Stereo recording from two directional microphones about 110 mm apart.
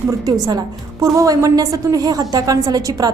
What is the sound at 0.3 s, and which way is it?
A woman's voice, 35° right (ahead or behind).